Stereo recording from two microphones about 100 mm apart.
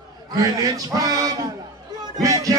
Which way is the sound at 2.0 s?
40° right (ahead or behind).